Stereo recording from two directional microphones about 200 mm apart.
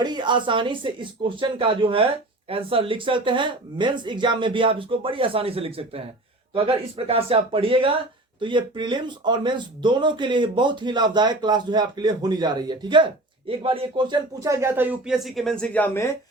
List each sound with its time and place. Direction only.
0.0 s speech: 20° right (ahead or behind); by 16.0 s 10° left (ahead or behind)